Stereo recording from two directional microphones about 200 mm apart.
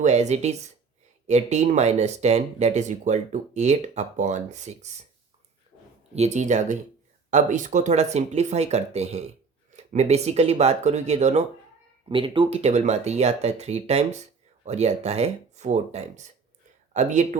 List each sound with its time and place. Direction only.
0.0 s speech: 35° right (ahead or behind)
6.1 s speech: 35° right (ahead or behind)